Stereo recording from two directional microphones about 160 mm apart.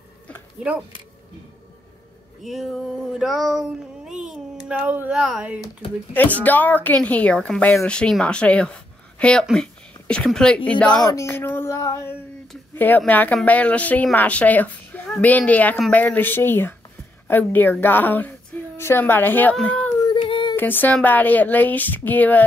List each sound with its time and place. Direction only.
0.6 s speech: 5° right (ahead or behind)
2.4 s a sound: centre (ahead or behind)
6.4 s a woman's voice: 10° left (ahead or behind)
11.1 s a sound: 15° left (ahead or behind)
12.7 s a woman's voice: 10° left (ahead or behind)
20.1 s child singing: 30° left (ahead or behind)
20.5 s a woman's voice: 10° left (ahead or behind)